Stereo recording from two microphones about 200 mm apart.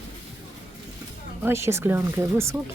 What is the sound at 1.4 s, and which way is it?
A woman's voice, 15° right (ahead or behind).